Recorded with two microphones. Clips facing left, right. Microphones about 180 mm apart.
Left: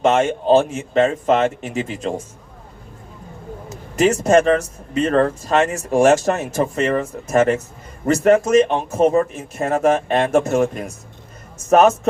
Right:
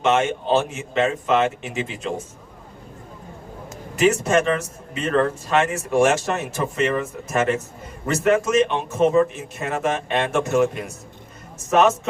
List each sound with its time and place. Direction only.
0.0 s a man's voice: 35° left (ahead or behind)
3.9 s a man's voice: 40° left (ahead or behind)